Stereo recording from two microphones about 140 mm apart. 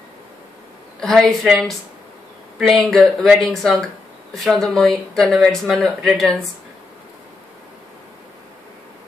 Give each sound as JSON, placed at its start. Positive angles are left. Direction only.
{"t": 1.0, "sound": "speech", "side_deg": 0}